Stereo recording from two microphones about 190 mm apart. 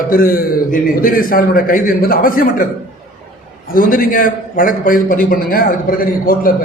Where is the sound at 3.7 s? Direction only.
45° left (ahead or behind).